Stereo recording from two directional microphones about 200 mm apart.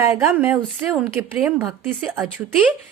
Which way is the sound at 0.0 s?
10° right (ahead or behind).